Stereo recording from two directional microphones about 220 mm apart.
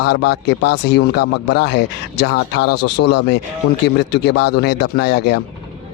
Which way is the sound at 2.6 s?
90° left.